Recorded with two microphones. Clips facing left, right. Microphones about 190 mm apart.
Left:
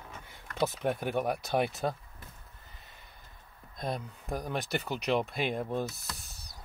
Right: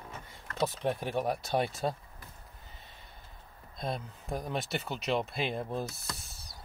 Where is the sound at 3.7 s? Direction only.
Centre (ahead or behind).